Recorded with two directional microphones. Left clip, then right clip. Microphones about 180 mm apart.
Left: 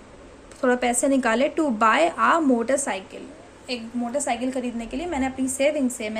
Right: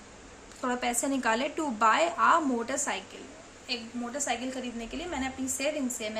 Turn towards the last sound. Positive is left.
turn(degrees=30)  # may be behind; listen again after turning